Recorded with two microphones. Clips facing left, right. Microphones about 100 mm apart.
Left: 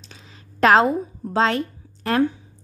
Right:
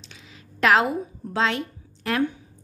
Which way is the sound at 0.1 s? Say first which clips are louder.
Left 1 dB; 35° left (ahead or behind).